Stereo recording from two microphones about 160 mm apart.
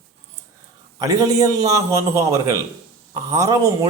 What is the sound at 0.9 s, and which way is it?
A man's voice, 20° right (ahead or behind).